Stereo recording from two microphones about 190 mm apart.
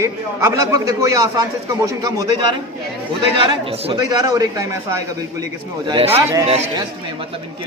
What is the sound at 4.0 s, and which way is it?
Speech, 20° right (ahead or behind).